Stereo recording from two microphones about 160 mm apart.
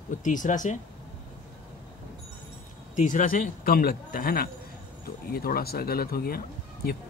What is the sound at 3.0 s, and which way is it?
A man's voice, 55° left (ahead or behind).